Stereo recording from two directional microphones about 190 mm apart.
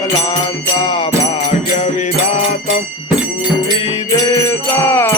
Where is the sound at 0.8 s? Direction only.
25° left (ahead or behind).